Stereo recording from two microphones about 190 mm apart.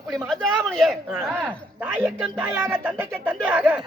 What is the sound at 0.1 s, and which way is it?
A man's voice, centre (ahead or behind).